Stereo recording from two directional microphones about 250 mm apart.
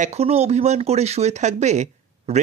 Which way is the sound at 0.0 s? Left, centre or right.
Right.